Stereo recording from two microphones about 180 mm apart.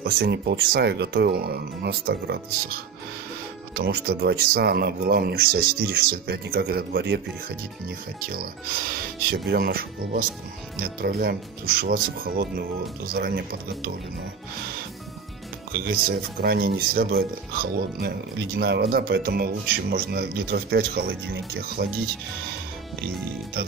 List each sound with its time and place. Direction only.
0.0 s speech: 65° right (ahead or behind)
9.5 s speech: 60° right (ahead or behind)
15.8 s speech: 55° right (ahead or behind)